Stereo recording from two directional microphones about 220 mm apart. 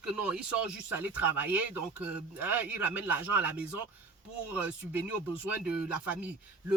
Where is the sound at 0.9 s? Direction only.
5° right (ahead or behind).